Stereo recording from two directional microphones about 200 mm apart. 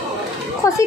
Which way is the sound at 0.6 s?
15° left (ahead or behind).